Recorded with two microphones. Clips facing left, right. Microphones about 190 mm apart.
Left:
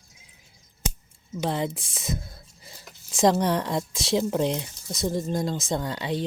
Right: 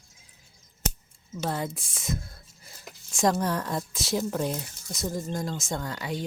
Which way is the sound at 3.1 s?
20° left (ahead or behind).